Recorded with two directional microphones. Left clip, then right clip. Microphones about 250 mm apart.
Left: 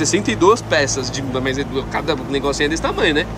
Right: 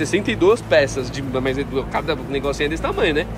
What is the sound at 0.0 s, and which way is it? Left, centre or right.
Speech, centre.